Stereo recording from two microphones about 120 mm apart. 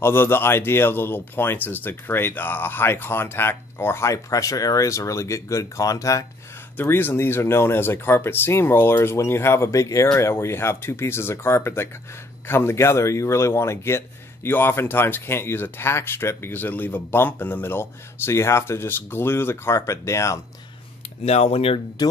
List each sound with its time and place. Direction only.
0.0 s speech: 20° left (ahead or behind)
6.8 s speech: 15° left (ahead or behind)
21.2 s speech: 60° left (ahead or behind)